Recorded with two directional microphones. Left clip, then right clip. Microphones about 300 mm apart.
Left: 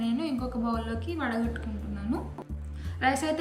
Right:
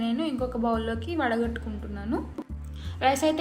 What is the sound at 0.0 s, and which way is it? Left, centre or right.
Speech, centre.